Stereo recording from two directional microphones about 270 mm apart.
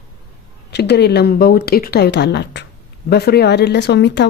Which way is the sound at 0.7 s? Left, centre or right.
Left.